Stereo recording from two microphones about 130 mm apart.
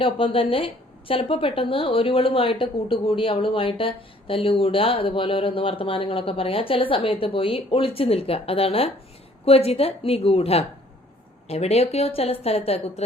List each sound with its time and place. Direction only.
0.0 s a woman's voice: 45° left (ahead or behind)